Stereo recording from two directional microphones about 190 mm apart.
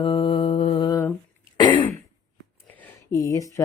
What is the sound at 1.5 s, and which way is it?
Throat clearing, 25° left (ahead or behind).